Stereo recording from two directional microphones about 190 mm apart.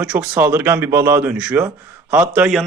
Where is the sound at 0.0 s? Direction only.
5° right (ahead or behind).